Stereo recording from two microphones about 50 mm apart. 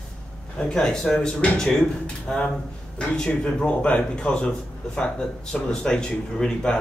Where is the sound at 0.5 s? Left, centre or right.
Centre.